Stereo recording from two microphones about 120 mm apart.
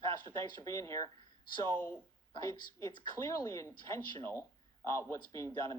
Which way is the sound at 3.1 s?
25° left (ahead or behind).